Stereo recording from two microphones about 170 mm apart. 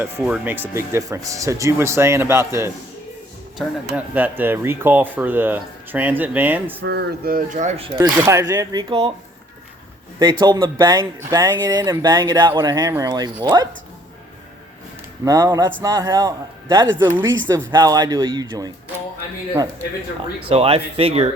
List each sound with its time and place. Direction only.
0.2 s speech: 5° right (ahead or behind)
3.9 s speech: 10° right (ahead or behind)
6.8 s speech: 75° right (ahead or behind); by 7.9 s 45° right (ahead or behind)
8.1 s speech: 15° right (ahead or behind); by 9.1 s 30° right (ahead or behind)
10.2 s speech: 25° right (ahead or behind)
15.2 s speech: 20° right (ahead or behind)
17.0 s speech: 10° right (ahead or behind)
17.5 s speech: 25° right (ahead or behind)
20.4 s speech: 35° right (ahead or behind)